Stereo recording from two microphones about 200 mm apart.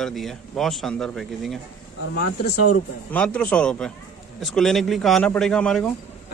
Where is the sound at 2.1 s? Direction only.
50° left (ahead or behind).